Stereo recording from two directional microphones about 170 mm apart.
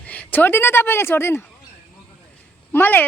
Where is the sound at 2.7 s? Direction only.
10° left (ahead or behind).